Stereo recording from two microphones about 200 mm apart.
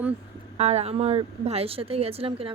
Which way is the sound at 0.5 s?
30° right (ahead or behind).